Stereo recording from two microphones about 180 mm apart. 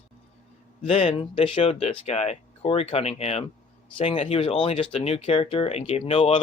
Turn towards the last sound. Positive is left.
turn(degrees=35)  # may be behind; listen again after turning